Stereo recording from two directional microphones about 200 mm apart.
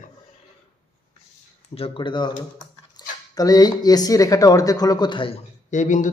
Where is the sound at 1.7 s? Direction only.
25° left (ahead or behind).